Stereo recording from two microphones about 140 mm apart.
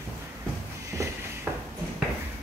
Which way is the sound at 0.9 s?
20° right (ahead or behind).